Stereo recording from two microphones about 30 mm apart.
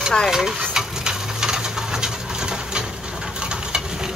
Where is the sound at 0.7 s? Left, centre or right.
Right.